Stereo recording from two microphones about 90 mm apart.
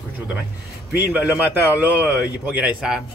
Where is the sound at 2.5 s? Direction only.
10° right (ahead or behind).